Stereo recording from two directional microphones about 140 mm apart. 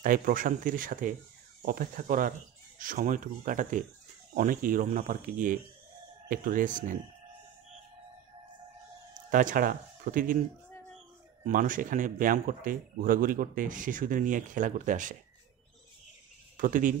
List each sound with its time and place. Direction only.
0.0 s speech: 80° right
1.7 s speech: 90° right
2.8 s speech: 70° right (ahead or behind)
4.4 s speech: 80° right
6.2 s speech: 85° right; by 7.0 s 70° right (ahead or behind)
9.3 s speech: 70° right (ahead or behind)
11.4 s speech: 75° right (ahead or behind)
16.5 s speech: 75° right (ahead or behind)